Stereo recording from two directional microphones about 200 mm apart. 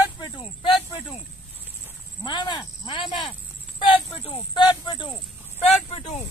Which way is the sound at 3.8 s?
25° left (ahead or behind).